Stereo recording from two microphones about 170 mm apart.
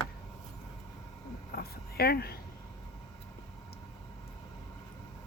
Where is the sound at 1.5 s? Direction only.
65° left (ahead or behind).